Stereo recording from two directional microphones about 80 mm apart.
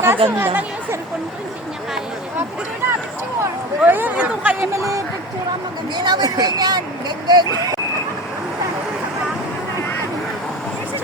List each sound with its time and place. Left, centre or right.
0.0 s speech: right
3.8 s speech: right
4.7 s speech: right
6.0 s speech: right